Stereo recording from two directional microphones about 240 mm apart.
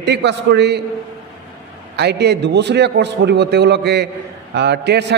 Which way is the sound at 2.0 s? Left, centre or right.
Right.